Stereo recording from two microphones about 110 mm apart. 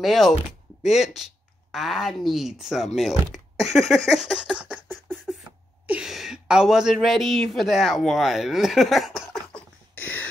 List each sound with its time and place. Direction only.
0.0 s speech: centre (ahead or behind)
4.8 s beatboxing: 5° left (ahead or behind)
5.9 s speech: 5° right (ahead or behind)
9.9 s a sound: 15° left (ahead or behind)